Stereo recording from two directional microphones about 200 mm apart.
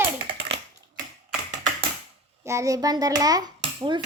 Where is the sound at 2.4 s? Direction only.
15° right (ahead or behind).